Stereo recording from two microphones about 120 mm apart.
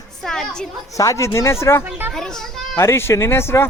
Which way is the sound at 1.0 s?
25° left (ahead or behind).